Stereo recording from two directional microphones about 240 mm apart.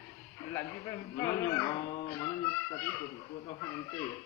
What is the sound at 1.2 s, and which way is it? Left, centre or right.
Speech, centre.